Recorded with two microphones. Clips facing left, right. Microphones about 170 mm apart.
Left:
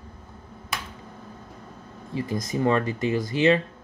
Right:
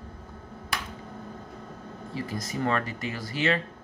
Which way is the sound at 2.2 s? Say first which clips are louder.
Left 5 dB; 20° left (ahead or behind).